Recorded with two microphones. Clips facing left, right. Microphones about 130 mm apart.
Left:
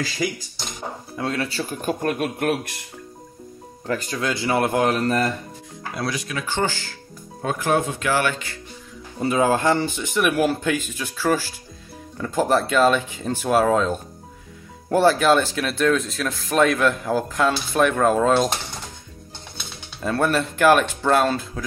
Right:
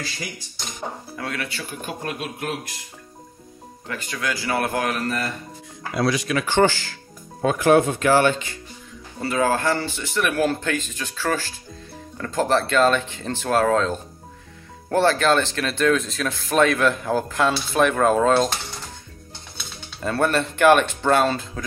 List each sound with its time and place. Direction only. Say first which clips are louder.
1.1 s speech: left 9 dB; 25° left (ahead or behind); by 2.7 s 60° left (ahead or behind)
3.8 s speech: left 6 dB; 40° left (ahead or behind)
4.2 s a man's voice: left 2 dB; 25° left (ahead or behind)
5.9 s speech: right 6 dB; 90° right
8.0 s speech: right 5 dB; 35° right (ahead or behind)
9.2 s speech: left 2 dB; 20° left (ahead or behind)
20.0 s speech: even; centre (ahead or behind)